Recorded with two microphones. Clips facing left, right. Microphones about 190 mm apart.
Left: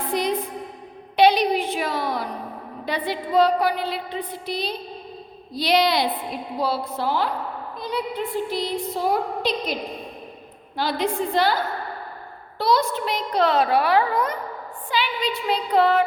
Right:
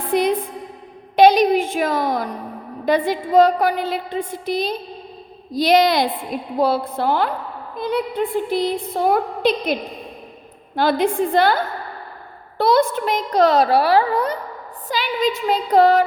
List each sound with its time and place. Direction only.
0.1 s a woman's voice: 55° right (ahead or behind)
7.8 s a sound: 55° right (ahead or behind)
10.8 s a woman's voice: 50° right (ahead or behind)
12.5 s a woman's voice: 55° right (ahead or behind)